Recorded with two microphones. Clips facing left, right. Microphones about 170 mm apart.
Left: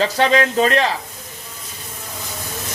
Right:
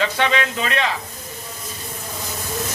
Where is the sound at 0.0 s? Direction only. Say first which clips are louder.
Left 4 dB; 40° left (ahead or behind).